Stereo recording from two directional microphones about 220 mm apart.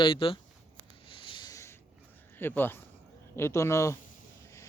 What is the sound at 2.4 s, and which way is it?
A man's voice, 10° left (ahead or behind).